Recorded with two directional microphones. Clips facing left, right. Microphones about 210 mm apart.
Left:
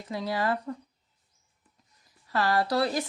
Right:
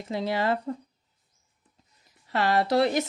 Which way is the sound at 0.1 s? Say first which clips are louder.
Right 2 dB; 25° right (ahead or behind).